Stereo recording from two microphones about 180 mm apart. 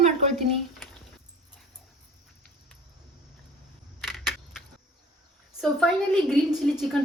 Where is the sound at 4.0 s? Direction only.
Centre (ahead or behind).